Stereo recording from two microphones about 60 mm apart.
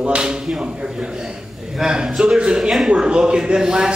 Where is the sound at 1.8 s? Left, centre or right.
Centre.